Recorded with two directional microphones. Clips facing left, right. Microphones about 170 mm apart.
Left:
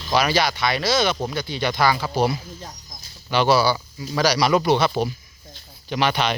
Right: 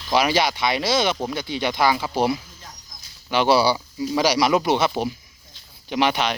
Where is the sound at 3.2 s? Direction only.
15° right (ahead or behind).